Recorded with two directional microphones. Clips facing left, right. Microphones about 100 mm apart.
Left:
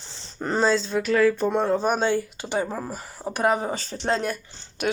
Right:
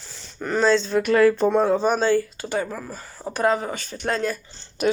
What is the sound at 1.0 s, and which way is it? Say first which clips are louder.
Speech: right 3 dB; 60° right (ahead or behind).